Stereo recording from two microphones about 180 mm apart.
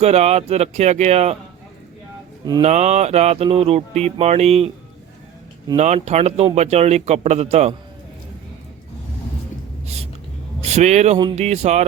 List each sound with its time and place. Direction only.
0.0 s speech: 35° right (ahead or behind)
2.5 s speech: 35° right (ahead or behind)
5.7 s speech: 40° right (ahead or behind)
9.8 s a sound: 35° right (ahead or behind)
10.6 s speech: 40° right (ahead or behind)